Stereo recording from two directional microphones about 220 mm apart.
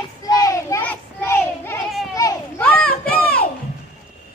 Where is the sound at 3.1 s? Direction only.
5° left (ahead or behind).